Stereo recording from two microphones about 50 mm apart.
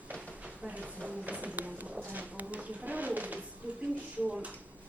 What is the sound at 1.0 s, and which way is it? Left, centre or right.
Music, right.